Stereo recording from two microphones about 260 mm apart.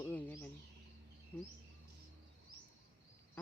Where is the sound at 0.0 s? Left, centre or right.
Centre.